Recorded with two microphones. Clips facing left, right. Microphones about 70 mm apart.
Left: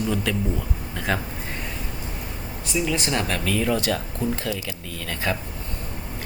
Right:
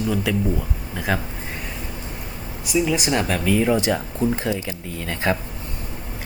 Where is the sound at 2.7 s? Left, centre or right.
Centre; by 5.4 s right.